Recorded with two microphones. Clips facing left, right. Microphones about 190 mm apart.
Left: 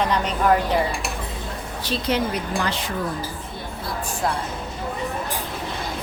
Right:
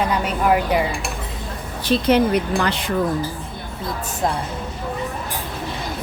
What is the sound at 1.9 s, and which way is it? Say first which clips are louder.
Speech: right 7 dB; 60° right (ahead or behind).